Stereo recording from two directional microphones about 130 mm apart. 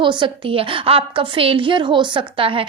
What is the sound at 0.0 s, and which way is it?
A woman's voice, 40° right (ahead or behind).